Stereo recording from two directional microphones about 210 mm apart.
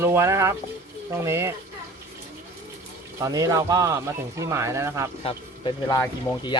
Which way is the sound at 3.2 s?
15° right (ahead or behind).